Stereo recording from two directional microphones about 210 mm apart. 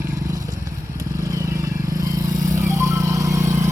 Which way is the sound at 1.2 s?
15° right (ahead or behind).